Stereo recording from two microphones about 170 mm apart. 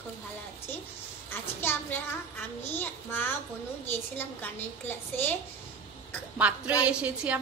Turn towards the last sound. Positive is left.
turn(degrees=-10)  # may be behind; listen again after turning